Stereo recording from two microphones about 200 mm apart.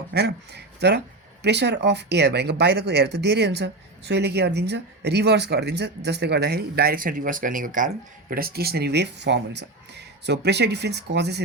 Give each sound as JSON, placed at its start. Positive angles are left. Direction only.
{"t": 0.1, "sound": "speech", "side_deg": -55}